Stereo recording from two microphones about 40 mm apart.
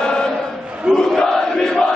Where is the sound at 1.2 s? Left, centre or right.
Centre.